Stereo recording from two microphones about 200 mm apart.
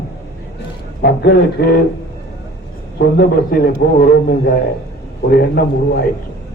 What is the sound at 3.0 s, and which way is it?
Speech, 50° left (ahead or behind).